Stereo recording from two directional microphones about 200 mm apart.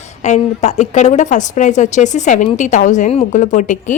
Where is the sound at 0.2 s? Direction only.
35° left (ahead or behind).